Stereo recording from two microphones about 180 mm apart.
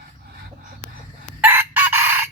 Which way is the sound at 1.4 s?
10° right (ahead or behind).